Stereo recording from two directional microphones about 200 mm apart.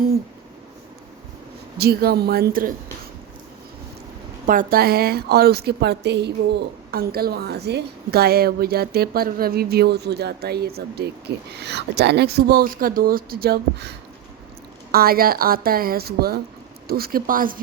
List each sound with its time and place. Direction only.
1.8 s a woman's voice: 50° right (ahead or behind)
4.4 s a woman's voice: 45° right (ahead or behind)
14.9 s a woman's voice: 50° right (ahead or behind)